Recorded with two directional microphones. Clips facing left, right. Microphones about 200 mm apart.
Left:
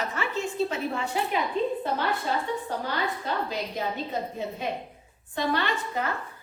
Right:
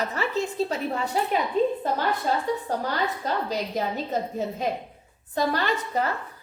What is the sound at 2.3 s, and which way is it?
A woman's voice, 40° right (ahead or behind).